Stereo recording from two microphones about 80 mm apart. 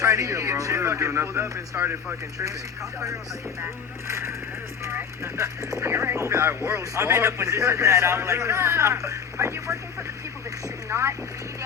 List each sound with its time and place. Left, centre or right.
0.0 s speech: right
4.1 s a man's voice: right
10.8 s speech: right